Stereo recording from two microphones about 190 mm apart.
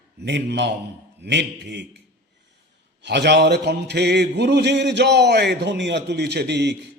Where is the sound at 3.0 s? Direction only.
65° right (ahead or behind).